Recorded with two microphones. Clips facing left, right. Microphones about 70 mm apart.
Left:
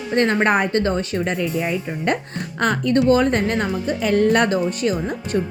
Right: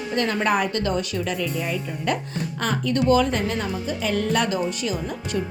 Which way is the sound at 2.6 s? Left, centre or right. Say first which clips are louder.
Left 5 dB; left.